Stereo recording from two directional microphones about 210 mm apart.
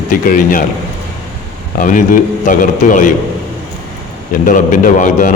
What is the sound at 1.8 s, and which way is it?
A man's voice, 40° left (ahead or behind).